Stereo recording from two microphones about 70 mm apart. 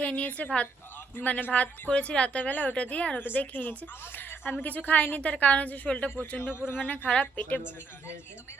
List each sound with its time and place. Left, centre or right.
0.0 s a woman's voice: centre
7.6 s a woman's voice: left